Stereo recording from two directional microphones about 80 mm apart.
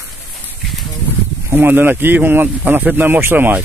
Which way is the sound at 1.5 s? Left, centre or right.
Right.